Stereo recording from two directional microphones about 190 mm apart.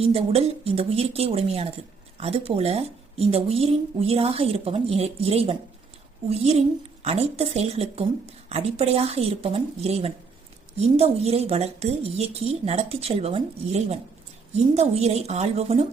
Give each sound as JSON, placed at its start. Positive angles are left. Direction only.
{"t": 0.0, "sound": "a woman's voice", "side_deg": -30}